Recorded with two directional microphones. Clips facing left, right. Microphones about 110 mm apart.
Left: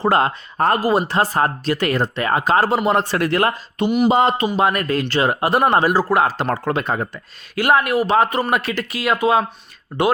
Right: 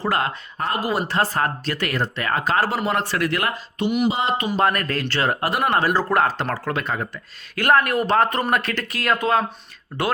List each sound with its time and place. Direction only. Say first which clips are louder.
0.0 s speech: left 6 dB; 30° left (ahead or behind)
0.5 s speech: left 10 dB; 50° left (ahead or behind)
0.9 s speech: left 4 dB; 20° left (ahead or behind); by 4.1 s 35° left (ahead or behind)
4.1 s speech: left 7 dB; 50° left (ahead or behind)
4.5 s speech: left 3 dB; 10° left (ahead or behind)
5.5 s speech: left 6 dB; 30° left (ahead or behind)
5.8 s speech: left 3 dB; 10° left (ahead or behind)
6.7 s speech: left 4 dB; 25° left (ahead or behind)
7.5 s speech: left 2 dB; 10° left (ahead or behind)